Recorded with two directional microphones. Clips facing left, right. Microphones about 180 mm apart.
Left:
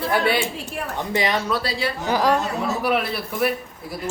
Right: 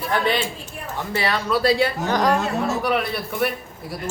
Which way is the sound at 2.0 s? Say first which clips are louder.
Left 4 dB; 5° left (ahead or behind).